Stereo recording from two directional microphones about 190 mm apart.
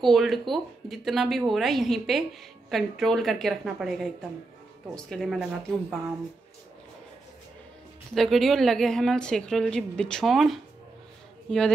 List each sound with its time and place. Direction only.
0.0 s a woman's voice: centre (ahead or behind)
8.1 s a woman's voice: centre (ahead or behind)